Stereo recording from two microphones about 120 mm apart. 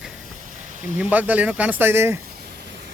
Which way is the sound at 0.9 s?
10° right (ahead or behind).